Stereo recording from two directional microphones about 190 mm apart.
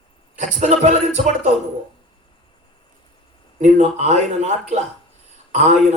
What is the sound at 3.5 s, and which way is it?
A man's voice, 35° right (ahead or behind).